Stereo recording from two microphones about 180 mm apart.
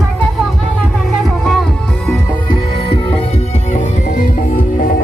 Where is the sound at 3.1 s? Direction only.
35° left (ahead or behind).